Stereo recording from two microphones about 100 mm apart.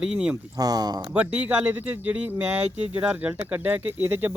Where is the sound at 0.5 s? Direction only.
40° right (ahead or behind).